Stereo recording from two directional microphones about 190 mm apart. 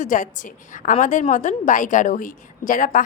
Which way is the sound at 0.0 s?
40° left (ahead or behind).